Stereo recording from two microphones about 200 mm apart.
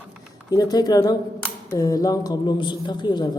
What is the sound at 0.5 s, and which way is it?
A woman's voice, 20° left (ahead or behind).